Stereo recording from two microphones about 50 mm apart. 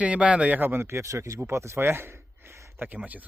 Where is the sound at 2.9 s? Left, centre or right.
Right.